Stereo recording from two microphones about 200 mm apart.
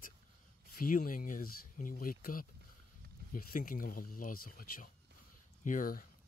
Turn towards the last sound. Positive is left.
turn(degrees=45)  # may be behind; listen again after turning